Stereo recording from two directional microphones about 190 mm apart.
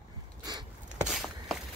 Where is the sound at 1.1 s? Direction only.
Centre (ahead or behind).